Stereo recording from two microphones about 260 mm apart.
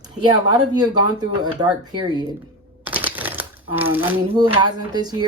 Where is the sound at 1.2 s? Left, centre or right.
Centre.